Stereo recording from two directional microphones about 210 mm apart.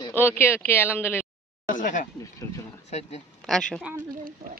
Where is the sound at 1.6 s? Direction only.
40° left (ahead or behind).